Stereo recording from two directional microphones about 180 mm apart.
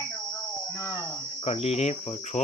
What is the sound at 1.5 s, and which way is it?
Cricket, 35° left (ahead or behind).